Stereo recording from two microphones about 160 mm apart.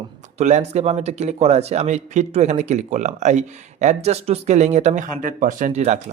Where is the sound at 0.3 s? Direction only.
45° right (ahead or behind).